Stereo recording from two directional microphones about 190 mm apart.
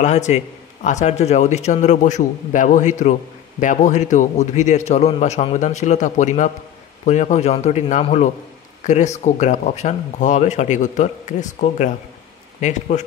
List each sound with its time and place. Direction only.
0.0 s a man's voice: 35° left (ahead or behind)